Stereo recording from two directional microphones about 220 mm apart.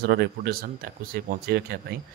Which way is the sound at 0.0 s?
45° right (ahead or behind).